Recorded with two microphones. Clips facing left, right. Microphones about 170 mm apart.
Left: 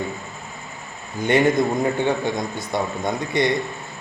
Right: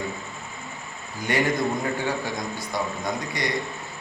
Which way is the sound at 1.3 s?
25° left (ahead or behind).